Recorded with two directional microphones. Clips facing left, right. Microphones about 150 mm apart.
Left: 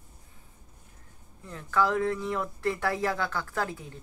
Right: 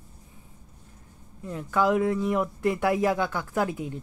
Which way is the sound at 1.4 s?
15° right (ahead or behind).